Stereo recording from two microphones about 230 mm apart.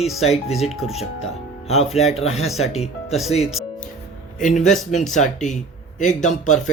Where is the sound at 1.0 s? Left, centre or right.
Left.